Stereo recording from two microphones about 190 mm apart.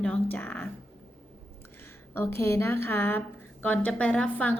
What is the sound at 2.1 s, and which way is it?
Speech, 10° left (ahead or behind).